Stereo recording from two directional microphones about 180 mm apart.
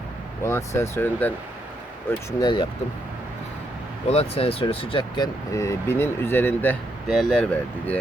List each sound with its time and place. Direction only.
0.4 s speech: 15° left (ahead or behind)
2.0 s speech: 25° left (ahead or behind)
4.1 s speech: 35° left (ahead or behind); by 6.7 s 10° left (ahead or behind)
7.1 s speech: centre (ahead or behind)